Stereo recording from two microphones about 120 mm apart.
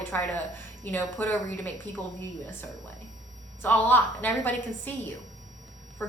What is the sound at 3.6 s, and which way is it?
A woman's voice, 15° left (ahead or behind).